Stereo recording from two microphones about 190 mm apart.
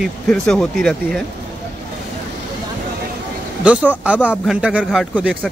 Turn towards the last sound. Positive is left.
turn(degrees=-5)  # may be behind; listen again after turning